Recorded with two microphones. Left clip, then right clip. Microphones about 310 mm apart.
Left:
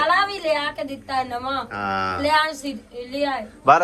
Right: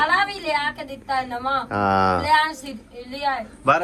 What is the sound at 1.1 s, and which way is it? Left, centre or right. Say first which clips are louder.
A woman's voice: right 2 dB; centre.